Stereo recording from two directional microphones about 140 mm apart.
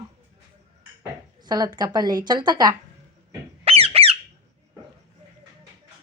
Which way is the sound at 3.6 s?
45° right (ahead or behind).